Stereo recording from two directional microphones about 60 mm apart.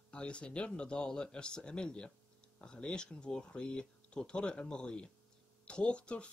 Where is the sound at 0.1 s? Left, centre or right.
Centre.